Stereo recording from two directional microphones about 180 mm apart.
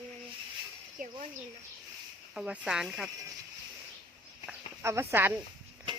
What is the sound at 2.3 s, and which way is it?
Speech, 5° right (ahead or behind).